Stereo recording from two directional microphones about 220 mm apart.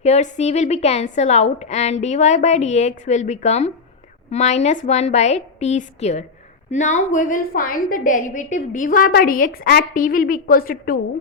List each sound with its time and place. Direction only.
0.0 s a woman's voice: 30° left (ahead or behind)